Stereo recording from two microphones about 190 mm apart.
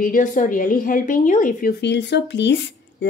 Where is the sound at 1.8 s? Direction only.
65° left (ahead or behind).